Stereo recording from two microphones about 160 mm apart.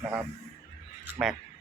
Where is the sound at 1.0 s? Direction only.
Centre (ahead or behind).